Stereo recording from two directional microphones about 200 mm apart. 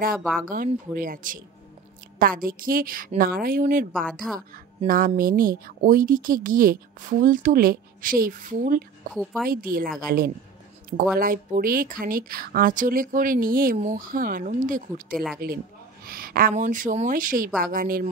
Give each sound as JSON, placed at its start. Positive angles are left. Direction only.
{"t": 0.4, "sound": "speech", "side_deg": -45}
{"t": 4.1, "sound": "speech", "side_deg": 0}
{"t": 4.8, "sound": "speech", "side_deg": -45}
{"t": 9.1, "sound": "speech", "side_deg": 0}
{"t": 9.5, "sound": "speech", "side_deg": -45}
{"t": 15.1, "sound": "speech", "side_deg": 0}
{"t": 16.1, "sound": "speech", "side_deg": -45}